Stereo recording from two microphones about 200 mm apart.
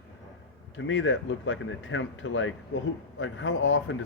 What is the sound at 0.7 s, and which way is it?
A man's voice, 70° left (ahead or behind).